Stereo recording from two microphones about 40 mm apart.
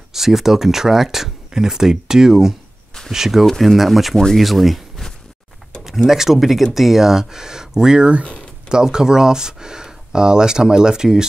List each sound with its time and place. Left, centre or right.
0.1 s speech: centre
3.4 s speech: centre